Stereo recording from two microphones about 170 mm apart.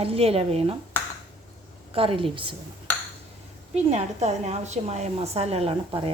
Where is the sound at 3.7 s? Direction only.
40° right (ahead or behind).